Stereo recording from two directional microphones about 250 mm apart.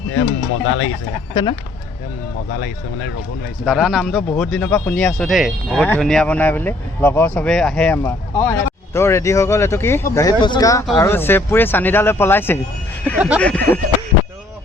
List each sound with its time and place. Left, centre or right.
0.1 s speech: left
3.7 s speech: centre
13.1 s speech: centre
13.4 s speech: centre